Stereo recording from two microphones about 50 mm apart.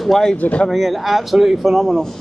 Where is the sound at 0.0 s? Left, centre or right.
Centre.